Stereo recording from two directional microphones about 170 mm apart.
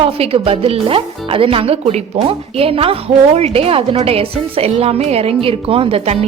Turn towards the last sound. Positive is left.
turn(degrees=-35)  # may be behind; listen again after turning